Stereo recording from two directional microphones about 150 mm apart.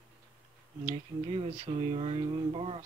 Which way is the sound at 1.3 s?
40° right (ahead or behind).